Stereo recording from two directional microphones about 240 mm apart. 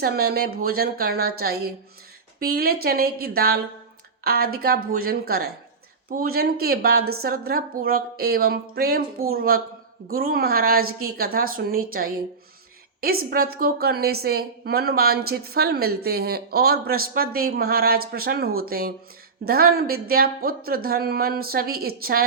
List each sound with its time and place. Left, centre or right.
0.0 s a woman's voice: right